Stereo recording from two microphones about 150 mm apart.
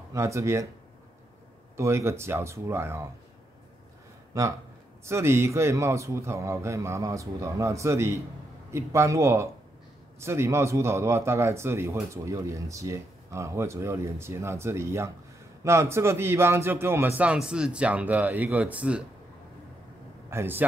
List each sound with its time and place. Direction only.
0.1 s speech: 20° right (ahead or behind)
1.8 s speech: 20° right (ahead or behind)
4.3 s speech: 20° right (ahead or behind)
20.2 s a man's voice: 15° right (ahead or behind)